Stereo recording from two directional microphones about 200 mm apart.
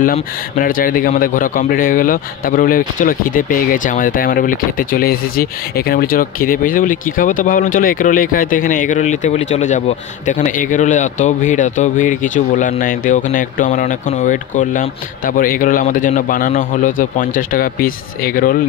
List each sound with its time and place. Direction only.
0.0 s a man's voice: 45° left (ahead or behind)